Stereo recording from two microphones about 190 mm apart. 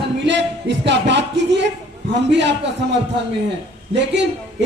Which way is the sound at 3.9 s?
65° right (ahead or behind).